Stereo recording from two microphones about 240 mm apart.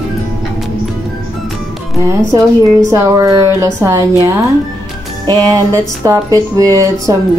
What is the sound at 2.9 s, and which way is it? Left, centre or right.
Speech, centre.